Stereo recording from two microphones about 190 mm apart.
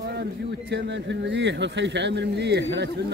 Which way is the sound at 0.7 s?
70° right (ahead or behind).